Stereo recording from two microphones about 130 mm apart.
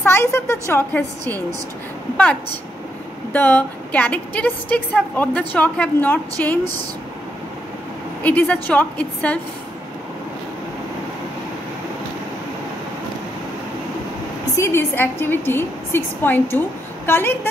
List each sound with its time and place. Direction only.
0.0 s a woman's voice: 20° left (ahead or behind)
3.3 s a woman's voice: 15° left (ahead or behind)
8.2 s a woman's voice: 15° left (ahead or behind)
14.6 s a woman's voice: 20° left (ahead or behind)